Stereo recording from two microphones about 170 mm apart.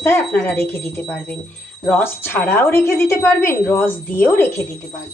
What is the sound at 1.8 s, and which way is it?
Speech, 10° left (ahead or behind).